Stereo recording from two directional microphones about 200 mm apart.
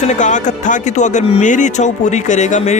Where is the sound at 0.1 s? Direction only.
40° left (ahead or behind).